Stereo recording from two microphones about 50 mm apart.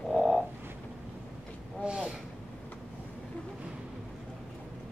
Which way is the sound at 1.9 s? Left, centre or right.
Centre.